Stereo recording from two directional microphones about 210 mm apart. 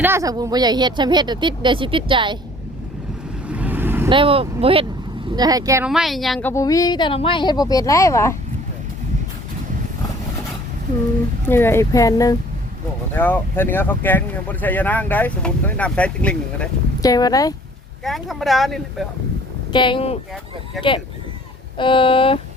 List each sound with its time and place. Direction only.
0.0 s a woman's voice: 15° right (ahead or behind)
3.4 s vehicle: 5° right (ahead or behind)
4.1 s a woman's voice: 25° right (ahead or behind)
5.9 s speech: centre (ahead or behind)
6.5 s speech: 15° left (ahead or behind)
11.4 s speech: 10° left (ahead or behind)
17.0 s speech: 20° left (ahead or behind)
18.0 s speech: centre (ahead or behind)
19.7 s speech: 25° left (ahead or behind)
20.8 s speech: centre (ahead or behind)
21.8 s speech: 25° left (ahead or behind)